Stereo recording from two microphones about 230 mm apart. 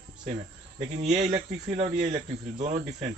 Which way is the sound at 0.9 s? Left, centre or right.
Right.